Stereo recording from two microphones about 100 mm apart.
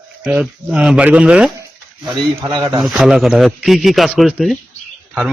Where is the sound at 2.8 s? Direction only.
5° right (ahead or behind).